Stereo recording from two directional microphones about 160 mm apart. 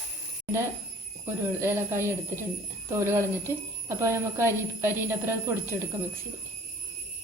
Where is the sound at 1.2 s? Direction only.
15° right (ahead or behind).